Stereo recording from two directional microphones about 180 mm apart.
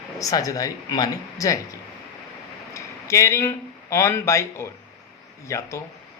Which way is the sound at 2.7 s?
15° left (ahead or behind).